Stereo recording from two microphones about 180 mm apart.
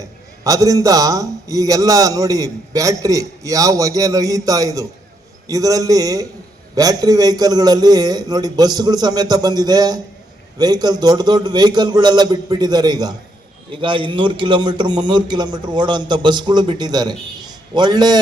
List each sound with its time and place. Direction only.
0.0 s a man's voice: 20° right (ahead or behind)